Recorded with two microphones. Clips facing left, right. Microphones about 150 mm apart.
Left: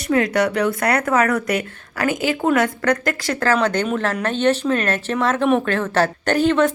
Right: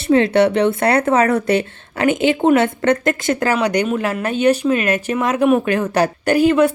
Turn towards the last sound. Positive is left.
turn(degrees=-10)  # may be behind; listen again after turning